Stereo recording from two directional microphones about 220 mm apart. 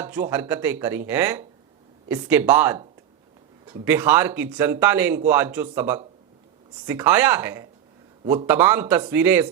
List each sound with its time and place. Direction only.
0.0 s speech: 10° right (ahead or behind)
3.8 s speech: 10° right (ahead or behind)
8.2 s a man's voice: 25° right (ahead or behind)
8.4 s speech: 10° right (ahead or behind)